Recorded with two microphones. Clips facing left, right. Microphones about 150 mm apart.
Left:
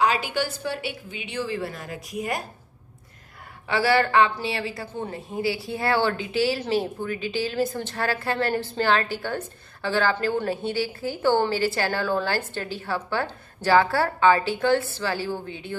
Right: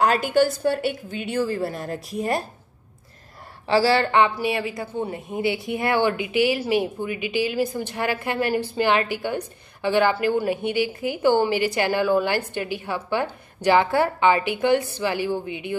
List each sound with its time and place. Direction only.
0.0 s a woman's voice: 50° right (ahead or behind); by 2.4 s 35° right (ahead or behind)
3.6 s a woman's voice: 30° right (ahead or behind)